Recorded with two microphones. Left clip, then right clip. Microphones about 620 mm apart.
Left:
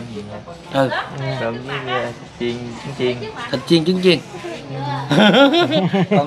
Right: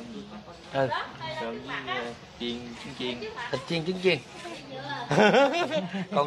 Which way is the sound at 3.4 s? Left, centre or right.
Centre.